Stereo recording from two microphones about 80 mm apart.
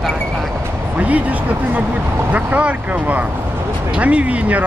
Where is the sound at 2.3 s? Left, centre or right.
Centre.